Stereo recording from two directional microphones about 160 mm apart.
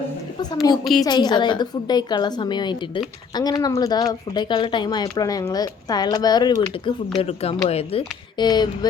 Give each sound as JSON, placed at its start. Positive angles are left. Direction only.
{"t": 0.5, "sound": "speech", "side_deg": 25}
{"t": 7.2, "sound": "speech", "side_deg": 40}